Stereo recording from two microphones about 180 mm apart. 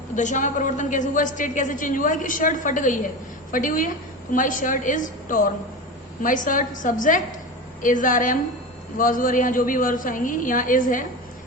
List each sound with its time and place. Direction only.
0.2 s a woman's voice: 45° left (ahead or behind)